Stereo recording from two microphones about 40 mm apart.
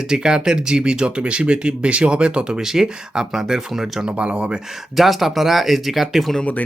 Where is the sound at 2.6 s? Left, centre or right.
Centre.